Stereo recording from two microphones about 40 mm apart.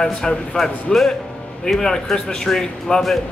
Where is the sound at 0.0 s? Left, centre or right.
Left.